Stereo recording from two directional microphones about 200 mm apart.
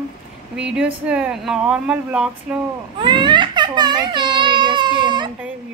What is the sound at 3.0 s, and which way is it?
Speech, 25° right (ahead or behind).